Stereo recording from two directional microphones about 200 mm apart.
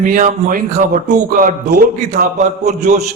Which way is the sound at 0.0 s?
40° right (ahead or behind).